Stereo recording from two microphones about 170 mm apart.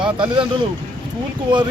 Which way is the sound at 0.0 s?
30° right (ahead or behind).